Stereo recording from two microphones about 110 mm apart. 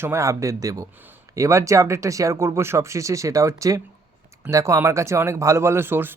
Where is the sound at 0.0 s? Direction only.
25° right (ahead or behind).